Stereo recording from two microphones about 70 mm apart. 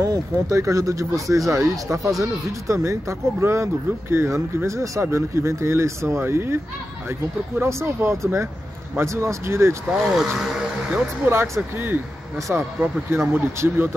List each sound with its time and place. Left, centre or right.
0.0 s speech: right
7.6 s speech: right
9.8 s speech: centre
11.3 s speech: right